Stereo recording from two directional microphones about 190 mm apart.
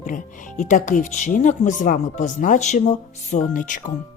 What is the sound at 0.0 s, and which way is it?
A woman's voice, 45° left (ahead or behind).